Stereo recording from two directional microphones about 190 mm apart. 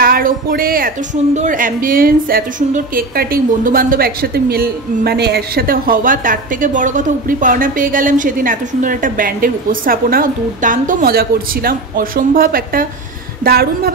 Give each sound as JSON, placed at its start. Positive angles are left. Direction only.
{"t": 0.0, "sound": "a woman's voice", "side_deg": -50}